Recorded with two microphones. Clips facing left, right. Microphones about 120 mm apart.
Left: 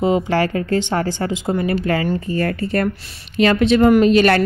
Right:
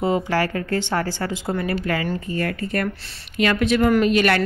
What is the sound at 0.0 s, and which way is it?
A woman's voice, 20° left (ahead or behind).